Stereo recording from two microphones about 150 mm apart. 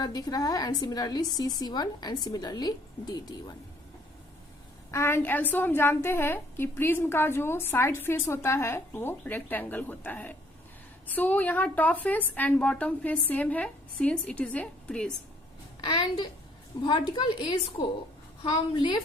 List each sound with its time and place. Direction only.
0.0 s a woman's voice: 25° left (ahead or behind)
4.9 s a woman's voice: 15° left (ahead or behind)
15.8 s a woman's voice: 30° left (ahead or behind)